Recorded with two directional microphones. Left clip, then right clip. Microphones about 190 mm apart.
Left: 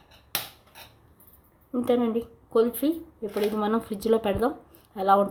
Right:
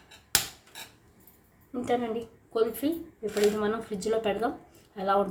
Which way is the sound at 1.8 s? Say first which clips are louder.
Left 4 dB; 60° left (ahead or behind).